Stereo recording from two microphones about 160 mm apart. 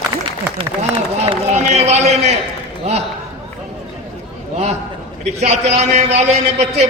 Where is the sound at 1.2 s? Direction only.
45° right (ahead or behind).